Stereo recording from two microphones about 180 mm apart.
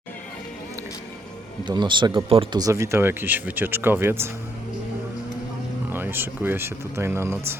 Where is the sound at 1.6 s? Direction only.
25° right (ahead or behind).